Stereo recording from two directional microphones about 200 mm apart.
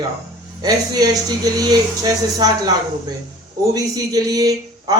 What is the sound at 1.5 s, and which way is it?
A man's voice, 20° right (ahead or behind).